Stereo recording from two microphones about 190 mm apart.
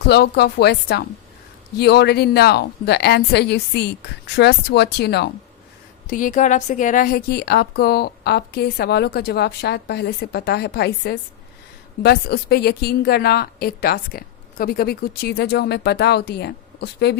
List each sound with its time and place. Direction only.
0.0 s a woman's voice: 60° left (ahead or behind)
6.1 s a woman's voice: 45° left (ahead or behind); by 17.2 s 60° left (ahead or behind)